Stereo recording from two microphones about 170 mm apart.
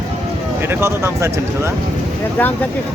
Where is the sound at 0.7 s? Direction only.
15° right (ahead or behind).